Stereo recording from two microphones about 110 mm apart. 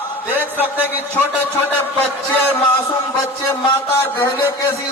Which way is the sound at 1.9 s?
15° left (ahead or behind).